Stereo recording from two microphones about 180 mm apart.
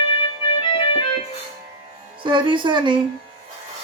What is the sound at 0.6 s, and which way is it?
Keyboard, 30° left (ahead or behind).